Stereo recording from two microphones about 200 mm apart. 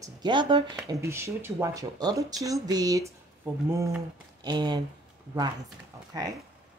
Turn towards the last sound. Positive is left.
turn(degrees=-20)  # may be behind; listen again after turning